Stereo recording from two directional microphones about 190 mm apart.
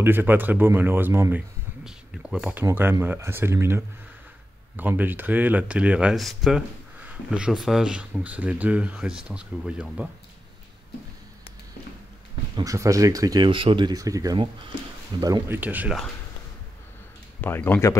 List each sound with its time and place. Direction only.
0.0 s speech: 10° right (ahead or behind)
12.5 s speech: 15° right (ahead or behind)
17.4 s speech: 10° left (ahead or behind)